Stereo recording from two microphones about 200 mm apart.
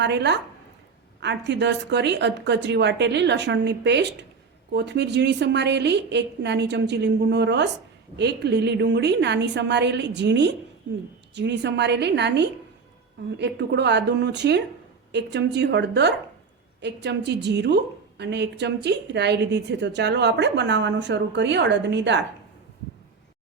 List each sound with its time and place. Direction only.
0.0 s a woman's voice: 60° right (ahead or behind)